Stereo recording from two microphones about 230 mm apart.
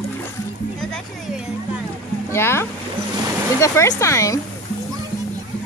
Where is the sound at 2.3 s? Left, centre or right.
Centre.